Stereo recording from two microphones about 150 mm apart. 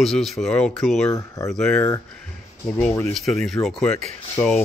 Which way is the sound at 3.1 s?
Centre (ahead or behind).